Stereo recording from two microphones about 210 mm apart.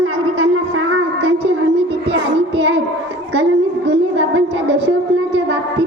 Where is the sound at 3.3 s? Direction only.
55° right (ahead or behind).